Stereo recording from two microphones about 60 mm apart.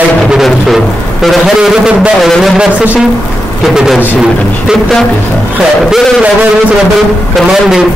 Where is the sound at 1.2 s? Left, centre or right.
Centre.